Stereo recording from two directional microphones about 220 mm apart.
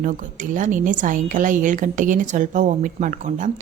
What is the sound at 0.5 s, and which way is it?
Speech, 35° right (ahead or behind).